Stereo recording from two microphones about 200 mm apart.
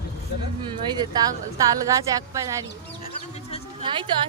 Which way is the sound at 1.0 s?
20° right (ahead or behind).